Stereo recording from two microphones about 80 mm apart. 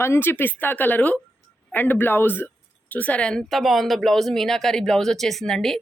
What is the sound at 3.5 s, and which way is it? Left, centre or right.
Speech, centre.